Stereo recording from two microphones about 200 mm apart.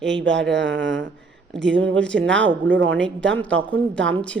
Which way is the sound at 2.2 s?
65° right (ahead or behind).